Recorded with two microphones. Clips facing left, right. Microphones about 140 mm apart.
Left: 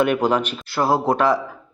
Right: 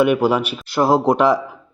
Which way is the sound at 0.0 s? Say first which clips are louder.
Right 3 dB; 10° right (ahead or behind).